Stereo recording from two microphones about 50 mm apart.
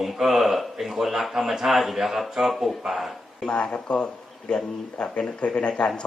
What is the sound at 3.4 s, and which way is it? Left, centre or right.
A man's voice, left.